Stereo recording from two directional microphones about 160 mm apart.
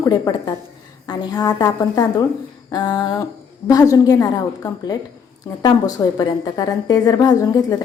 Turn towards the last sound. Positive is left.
turn(degrees=25)  # may be behind; listen again after turning